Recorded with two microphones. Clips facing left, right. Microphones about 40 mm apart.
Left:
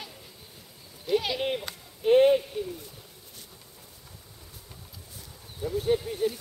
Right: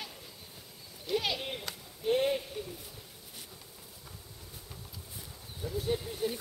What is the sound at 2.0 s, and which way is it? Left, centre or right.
Speech, left.